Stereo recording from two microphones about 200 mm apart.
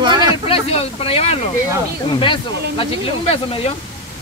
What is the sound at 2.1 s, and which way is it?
Speech, 25° left (ahead or behind).